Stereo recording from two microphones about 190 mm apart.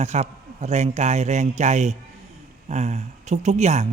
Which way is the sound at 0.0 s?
35° right (ahead or behind).